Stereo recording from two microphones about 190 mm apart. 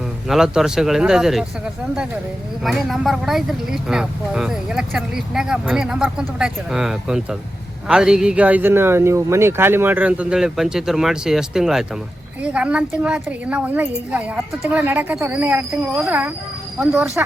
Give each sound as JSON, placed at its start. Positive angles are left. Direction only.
{"t": 0.3, "sound": "speech", "side_deg": 0}
{"t": 2.6, "sound": "a woman's voice", "side_deg": 0}